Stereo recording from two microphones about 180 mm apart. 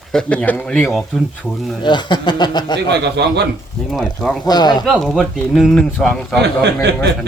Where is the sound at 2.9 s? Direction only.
70° right (ahead or behind).